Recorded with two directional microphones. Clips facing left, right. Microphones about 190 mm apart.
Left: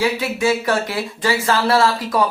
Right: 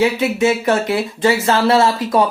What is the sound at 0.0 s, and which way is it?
Speech, 25° right (ahead or behind).